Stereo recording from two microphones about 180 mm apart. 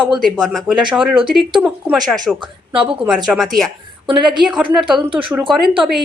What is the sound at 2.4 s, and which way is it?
Speech, 30° right (ahead or behind).